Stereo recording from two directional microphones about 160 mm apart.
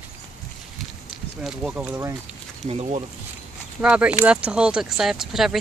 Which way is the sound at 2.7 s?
40° right (ahead or behind).